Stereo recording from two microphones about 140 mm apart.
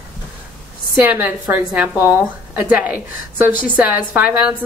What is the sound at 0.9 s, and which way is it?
A woman's voice, 15° right (ahead or behind).